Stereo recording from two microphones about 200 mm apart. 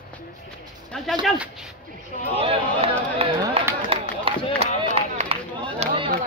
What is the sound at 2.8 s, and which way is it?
Chatter, 30° right (ahead or behind).